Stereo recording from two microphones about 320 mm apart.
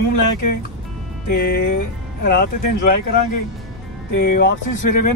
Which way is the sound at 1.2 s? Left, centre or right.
Left.